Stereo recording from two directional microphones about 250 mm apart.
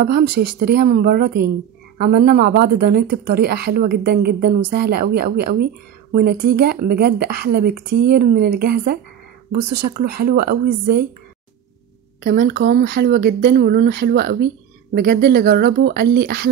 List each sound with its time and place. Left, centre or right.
0.0 s speech: right
9.9 s speech: right
12.2 s speech: right